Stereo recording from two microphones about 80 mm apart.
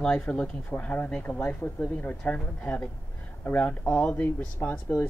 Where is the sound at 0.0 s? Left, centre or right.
Centre.